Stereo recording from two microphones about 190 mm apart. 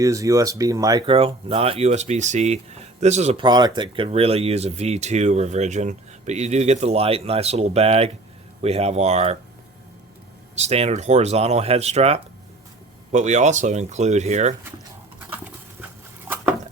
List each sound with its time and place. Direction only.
0.0 s speech: 15° right (ahead or behind)
1.1 s speech: 30° right (ahead or behind)
3.4 s speech: 25° right (ahead or behind)
10.5 s speech: 35° right (ahead or behind)